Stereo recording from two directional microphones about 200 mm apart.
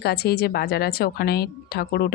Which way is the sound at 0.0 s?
50° left (ahead or behind).